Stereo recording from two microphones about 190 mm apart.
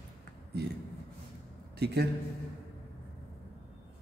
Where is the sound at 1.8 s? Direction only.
60° right (ahead or behind).